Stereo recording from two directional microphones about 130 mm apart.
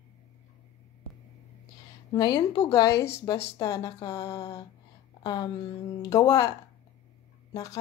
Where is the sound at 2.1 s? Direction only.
35° left (ahead or behind).